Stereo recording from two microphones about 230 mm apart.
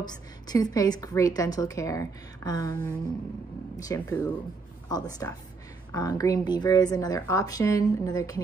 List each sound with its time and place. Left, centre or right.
0.0 s a woman's voice: centre